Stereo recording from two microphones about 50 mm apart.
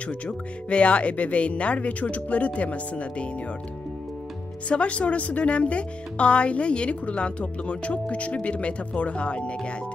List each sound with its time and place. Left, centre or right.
0.0 s speech: left
4.6 s speech: left